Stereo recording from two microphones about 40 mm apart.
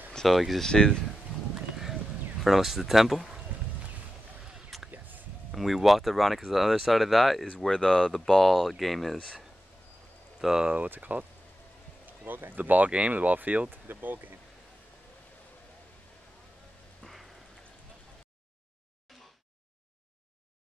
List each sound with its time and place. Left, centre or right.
0.3 s speech: centre
0.6 s speech: centre
2.4 s speech: centre
4.7 s a sound: centre
5.5 s speech: centre
7.6 s speech: centre
10.4 s speech: centre
11.0 s speech: right
12.3 s speech: right
17.0 s a sound: centre
19.1 s a sound: centre